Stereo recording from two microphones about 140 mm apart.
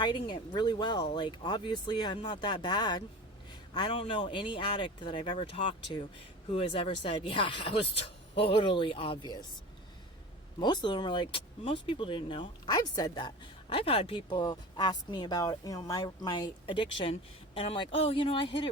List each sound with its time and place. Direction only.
0.0 s speech: 30° left (ahead or behind)
10.6 s speech: 30° left (ahead or behind)